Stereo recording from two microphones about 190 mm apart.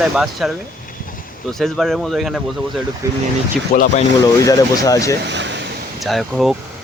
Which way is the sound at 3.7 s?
50° left (ahead or behind).